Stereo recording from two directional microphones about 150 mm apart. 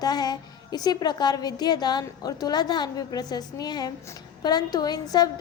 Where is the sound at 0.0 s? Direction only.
25° left (ahead or behind).